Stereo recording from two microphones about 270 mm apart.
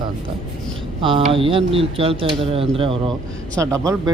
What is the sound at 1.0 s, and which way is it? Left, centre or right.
A man's voice, centre.